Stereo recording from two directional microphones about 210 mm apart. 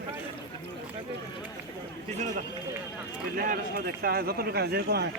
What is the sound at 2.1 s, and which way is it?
Speech, 35° right (ahead or behind).